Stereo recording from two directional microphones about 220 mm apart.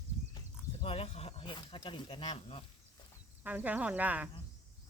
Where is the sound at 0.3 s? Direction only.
25° left (ahead or behind).